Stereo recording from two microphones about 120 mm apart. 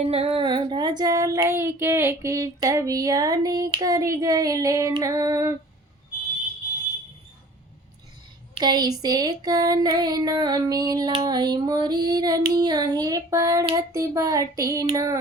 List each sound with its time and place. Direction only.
0.0 s child singing: 55° right (ahead or behind); by 3.7 s 30° right (ahead or behind)
3.8 s female singing: 30° right (ahead or behind)
8.5 s child singing: 35° right (ahead or behind)
13.7 s female singing: 25° right (ahead or behind)